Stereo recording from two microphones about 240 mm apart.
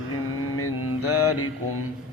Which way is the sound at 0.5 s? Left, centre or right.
Left.